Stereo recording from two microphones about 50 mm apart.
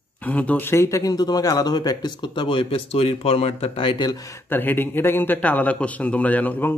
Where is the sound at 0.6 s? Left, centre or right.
Left.